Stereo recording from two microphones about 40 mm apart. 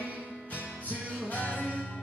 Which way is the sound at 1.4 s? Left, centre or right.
Left.